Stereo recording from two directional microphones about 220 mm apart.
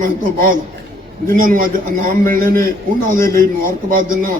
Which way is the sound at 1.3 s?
40° right (ahead or behind).